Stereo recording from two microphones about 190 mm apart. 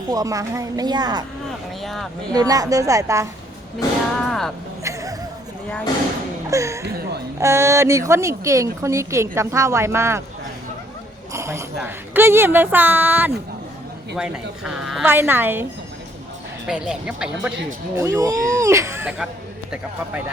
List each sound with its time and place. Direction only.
0.1 s a woman's voice: 20° right (ahead or behind)
1.5 s vehicle: centre (ahead or behind)
2.3 s a woman's voice: 20° right (ahead or behind)
4.3 s vehicle: centre (ahead or behind)
4.8 s a sound: 15° right (ahead or behind)
6.5 s a woman's voice: 15° right (ahead or behind)
11.3 s a woman's voice: 15° right (ahead or behind)
16.6 s a woman's voice: 5° right (ahead or behind)
17.9 s a woman's voice: 15° right (ahead or behind)